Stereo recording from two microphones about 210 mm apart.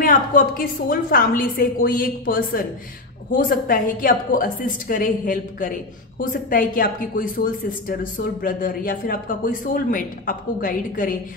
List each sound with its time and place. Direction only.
0.0 s a woman's voice: 40° left (ahead or behind)